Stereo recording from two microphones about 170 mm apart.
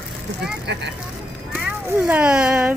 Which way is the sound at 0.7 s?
90° right.